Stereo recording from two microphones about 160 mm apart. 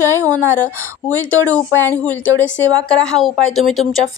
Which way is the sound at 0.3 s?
10° left (ahead or behind).